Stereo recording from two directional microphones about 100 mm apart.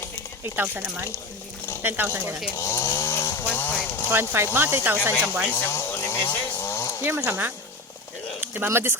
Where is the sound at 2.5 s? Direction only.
30° left (ahead or behind).